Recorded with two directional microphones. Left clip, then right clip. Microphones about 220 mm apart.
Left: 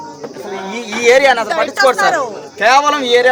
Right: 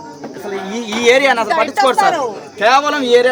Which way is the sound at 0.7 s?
10° right (ahead or behind).